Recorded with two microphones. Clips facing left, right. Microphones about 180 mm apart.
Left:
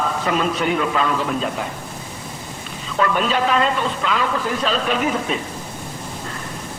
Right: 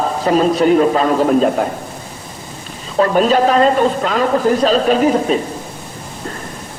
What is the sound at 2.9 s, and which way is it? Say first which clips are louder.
A man's voice: right 7 dB; 35° right (ahead or behind).